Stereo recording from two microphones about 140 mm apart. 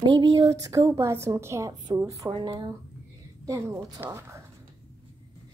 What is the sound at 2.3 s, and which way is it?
Speech, 35° right (ahead or behind).